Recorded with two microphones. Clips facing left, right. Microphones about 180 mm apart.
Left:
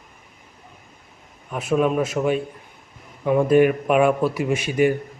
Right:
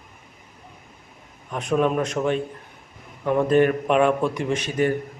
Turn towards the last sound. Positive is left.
turn(degrees=10)  # may be behind; listen again after turning